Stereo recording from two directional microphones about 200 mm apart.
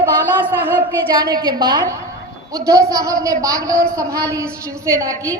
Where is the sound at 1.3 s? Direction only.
20° right (ahead or behind).